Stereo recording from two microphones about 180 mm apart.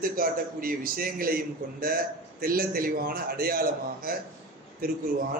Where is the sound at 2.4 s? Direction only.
55° right (ahead or behind).